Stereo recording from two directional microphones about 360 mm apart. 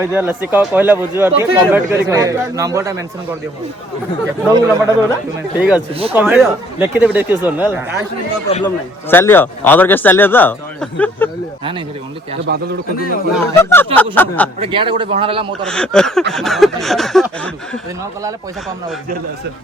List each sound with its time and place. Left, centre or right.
0.0 s speech: centre
4.5 s a man's voice: centre
5.9 s speech: centre
6.1 s a man's voice: centre
8.4 s speech: centre
9.0 s a man's voice: centre
12.5 s a man's voice: right
13.3 s a man's voice: centre
14.6 s speech: centre
15.6 s a man's voice: centre